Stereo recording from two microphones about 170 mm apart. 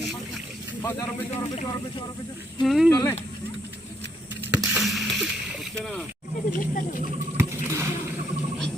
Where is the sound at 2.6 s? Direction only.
Centre (ahead or behind).